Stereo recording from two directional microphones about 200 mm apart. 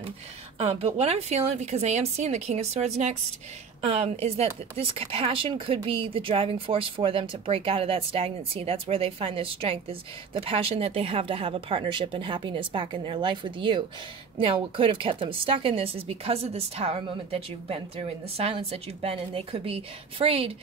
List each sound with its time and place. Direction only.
0.6 s a woman's voice: 30° right (ahead or behind)